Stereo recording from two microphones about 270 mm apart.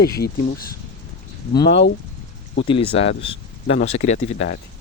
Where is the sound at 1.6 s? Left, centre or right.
Left.